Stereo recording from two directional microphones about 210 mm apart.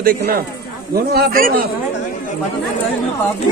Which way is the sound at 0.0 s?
45° right (ahead or behind).